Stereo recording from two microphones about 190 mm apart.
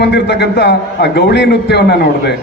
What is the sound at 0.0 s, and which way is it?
A man's voice, 60° left (ahead or behind).